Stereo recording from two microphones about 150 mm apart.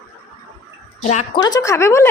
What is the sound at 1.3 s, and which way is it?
Speech, 25° left (ahead or behind).